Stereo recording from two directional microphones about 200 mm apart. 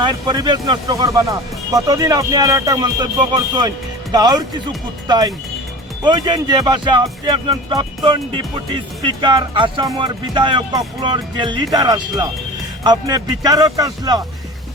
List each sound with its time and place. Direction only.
0.0 s speech: 20° right (ahead or behind)